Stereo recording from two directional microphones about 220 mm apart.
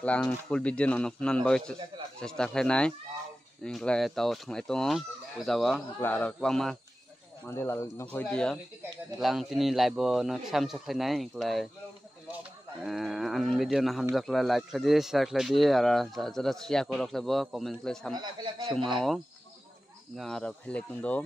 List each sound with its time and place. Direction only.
0.0 s speech: 5° left (ahead or behind)
12.8 s speech: centre (ahead or behind)
18.1 s a man's voice: 20° right (ahead or behind)
20.2 s speech: centre (ahead or behind)